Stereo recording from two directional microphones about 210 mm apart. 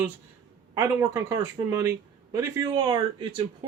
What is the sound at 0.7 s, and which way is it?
Speech, 15° right (ahead or behind).